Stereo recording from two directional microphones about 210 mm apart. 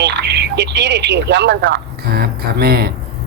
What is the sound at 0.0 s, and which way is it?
Speech, 55° right (ahead or behind).